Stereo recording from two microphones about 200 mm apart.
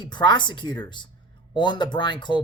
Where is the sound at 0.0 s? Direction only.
20° left (ahead or behind).